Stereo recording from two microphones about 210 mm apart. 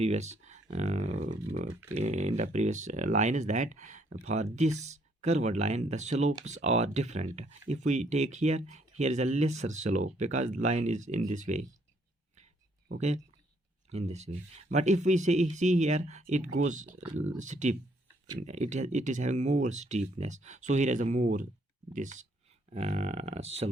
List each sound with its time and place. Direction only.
0.0 s speech: 30° right (ahead or behind)
13.9 s speech: 30° right (ahead or behind)
16.8 s speech: 10° right (ahead or behind)
17.4 s speech: 35° right (ahead or behind)